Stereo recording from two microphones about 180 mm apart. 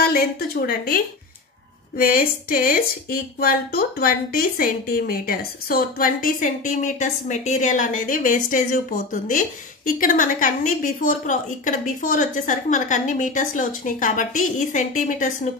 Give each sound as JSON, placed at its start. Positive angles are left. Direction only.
{"t": 0.0, "sound": "a woman's voice", "side_deg": 60}